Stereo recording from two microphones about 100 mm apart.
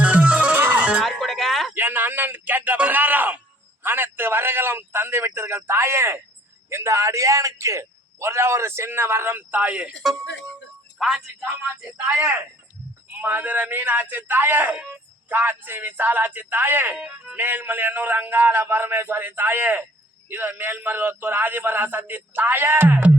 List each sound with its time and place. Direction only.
0.0 s music: 10° right (ahead or behind)
1.0 s a sound: 5° left (ahead or behind)
1.7 s speech: 20° right (ahead or behind); by 11.2 s centre (ahead or behind)
11.3 s speech: 25° right (ahead or behind)
17.0 s speech: 10° right (ahead or behind)